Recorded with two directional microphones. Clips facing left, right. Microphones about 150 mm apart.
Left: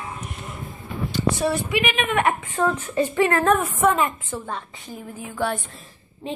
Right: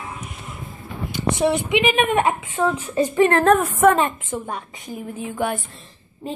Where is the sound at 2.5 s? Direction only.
10° right (ahead or behind).